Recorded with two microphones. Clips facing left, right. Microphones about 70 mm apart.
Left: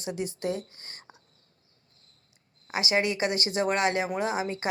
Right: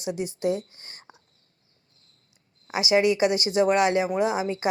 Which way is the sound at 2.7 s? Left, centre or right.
Left.